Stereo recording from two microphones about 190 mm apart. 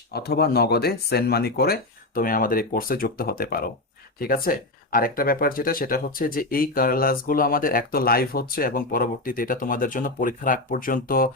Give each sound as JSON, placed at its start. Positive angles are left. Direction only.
{"t": 0.1, "sound": "speech", "side_deg": 55}